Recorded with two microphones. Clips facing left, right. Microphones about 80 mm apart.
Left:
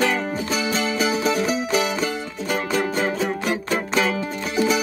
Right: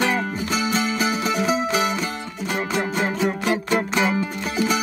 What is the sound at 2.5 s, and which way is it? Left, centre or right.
Music, centre.